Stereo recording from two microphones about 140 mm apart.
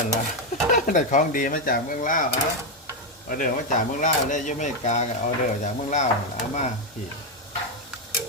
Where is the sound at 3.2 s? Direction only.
75° left (ahead or behind); by 5.0 s 55° left (ahead or behind).